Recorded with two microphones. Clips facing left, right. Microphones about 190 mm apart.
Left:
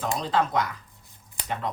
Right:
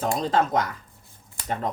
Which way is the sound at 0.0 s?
45° right (ahead or behind).